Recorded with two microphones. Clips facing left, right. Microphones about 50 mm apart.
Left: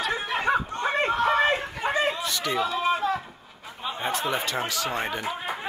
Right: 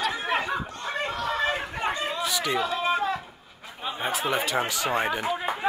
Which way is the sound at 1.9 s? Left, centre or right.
Left.